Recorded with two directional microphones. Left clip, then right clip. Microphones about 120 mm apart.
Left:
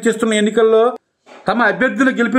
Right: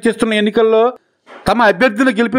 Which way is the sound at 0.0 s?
45° right (ahead or behind).